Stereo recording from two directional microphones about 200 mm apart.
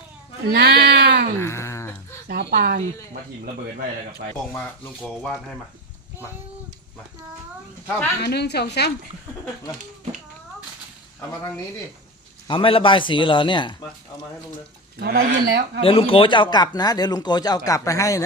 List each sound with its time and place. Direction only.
0.4 s speech: 50° right (ahead or behind)
1.4 s a sound: 15° left (ahead or behind)
2.2 s speech: 55° right (ahead or behind)
5.0 s speech: 5° left (ahead or behind)
8.2 s a woman's voice: 55° left (ahead or behind)
12.5 s speech: 25° left (ahead or behind)
14.9 s speech: 50° right (ahead or behind)
15.3 s speech: 60° right (ahead or behind)
15.8 s speech: 25° left (ahead or behind)